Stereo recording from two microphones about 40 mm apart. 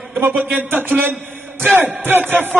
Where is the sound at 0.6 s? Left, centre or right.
Right.